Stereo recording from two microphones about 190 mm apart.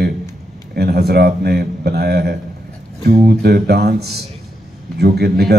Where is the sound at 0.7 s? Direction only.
55° right (ahead or behind).